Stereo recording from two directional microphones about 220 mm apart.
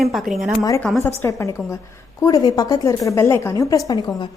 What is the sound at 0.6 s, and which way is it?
Speech, 15° left (ahead or behind).